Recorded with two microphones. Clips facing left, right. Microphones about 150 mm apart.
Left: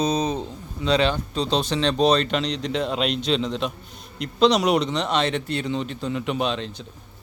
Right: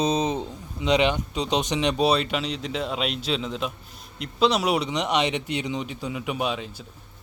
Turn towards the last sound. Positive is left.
turn(degrees=-10)  # may be behind; listen again after turning